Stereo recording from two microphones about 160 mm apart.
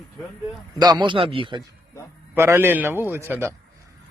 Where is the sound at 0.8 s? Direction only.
25° right (ahead or behind).